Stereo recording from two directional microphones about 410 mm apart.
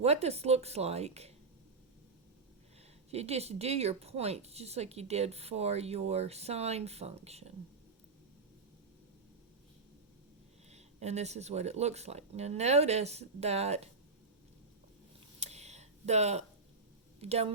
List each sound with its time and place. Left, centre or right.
0.0 s speech: centre
3.1 s speech: centre
10.7 s speech: centre
15.4 s a sound: centre
17.2 s speech: centre